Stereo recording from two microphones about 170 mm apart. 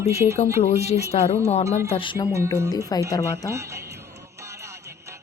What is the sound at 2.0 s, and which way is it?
Speech, 25° left (ahead or behind).